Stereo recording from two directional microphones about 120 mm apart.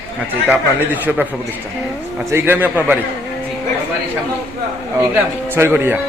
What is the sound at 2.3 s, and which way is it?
Speech, 15° right (ahead or behind).